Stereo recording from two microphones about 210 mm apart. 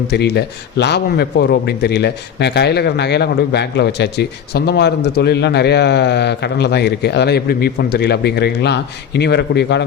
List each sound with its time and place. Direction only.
0.1 s a man's voice: 50° left (ahead or behind)